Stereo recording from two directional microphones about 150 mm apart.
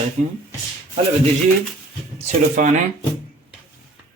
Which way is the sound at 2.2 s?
55° right (ahead or behind).